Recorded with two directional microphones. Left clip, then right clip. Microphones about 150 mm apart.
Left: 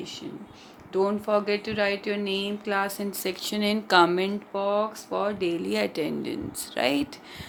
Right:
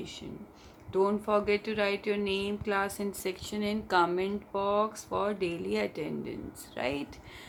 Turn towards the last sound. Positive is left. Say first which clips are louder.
# left 8 dB
turn(degrees=45)  # may be behind; listen again after turning